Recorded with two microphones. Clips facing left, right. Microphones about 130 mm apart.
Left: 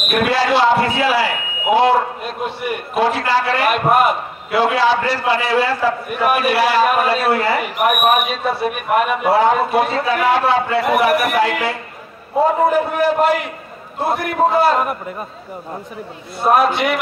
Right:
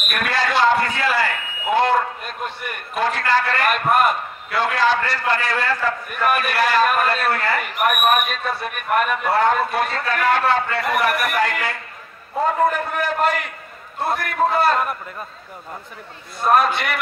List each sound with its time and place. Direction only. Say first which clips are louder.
0.1 s a man's voice: left 6 dB; 10° left (ahead or behind)
16.3 s a man's voice: left 3 dB; 5° left (ahead or behind)